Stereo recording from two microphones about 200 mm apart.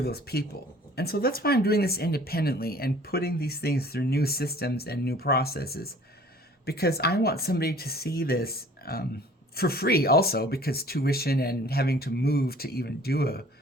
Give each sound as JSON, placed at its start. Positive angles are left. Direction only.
{"t": 0.0, "sound": "speech", "side_deg": 50}